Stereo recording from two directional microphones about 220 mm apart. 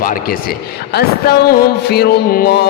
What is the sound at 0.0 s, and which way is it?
Music, 40° left (ahead or behind).